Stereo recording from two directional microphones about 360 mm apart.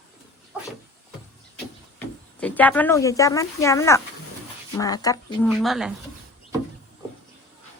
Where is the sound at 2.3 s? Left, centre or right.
Centre.